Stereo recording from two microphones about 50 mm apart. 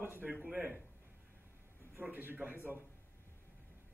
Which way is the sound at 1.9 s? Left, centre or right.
Right.